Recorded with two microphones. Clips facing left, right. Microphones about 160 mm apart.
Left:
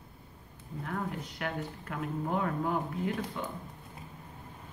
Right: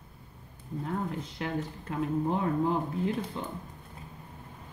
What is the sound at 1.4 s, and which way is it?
Speech, 25° right (ahead or behind).